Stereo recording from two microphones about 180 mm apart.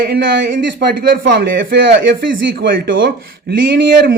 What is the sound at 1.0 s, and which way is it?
Speech, 50° right (ahead or behind).